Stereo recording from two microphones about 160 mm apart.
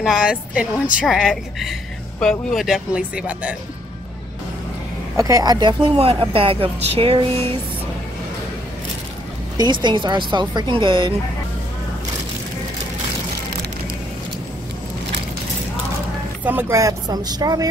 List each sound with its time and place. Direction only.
0.0 s speech: 5° right (ahead or behind)
5.1 s speech: 20° right (ahead or behind)
9.6 s speech: 30° right (ahead or behind)
16.4 s speech: 15° right (ahead or behind)